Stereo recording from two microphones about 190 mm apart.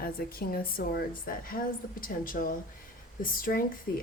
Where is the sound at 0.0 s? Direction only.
50° left (ahead or behind).